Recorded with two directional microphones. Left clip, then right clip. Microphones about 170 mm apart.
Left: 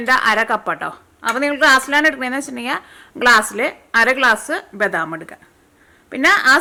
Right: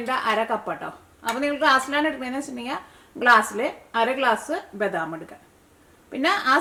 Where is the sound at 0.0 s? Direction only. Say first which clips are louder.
Left 8 dB; 25° left (ahead or behind).